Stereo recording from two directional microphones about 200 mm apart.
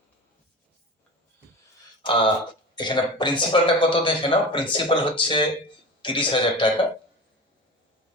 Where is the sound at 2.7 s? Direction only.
25° left (ahead or behind).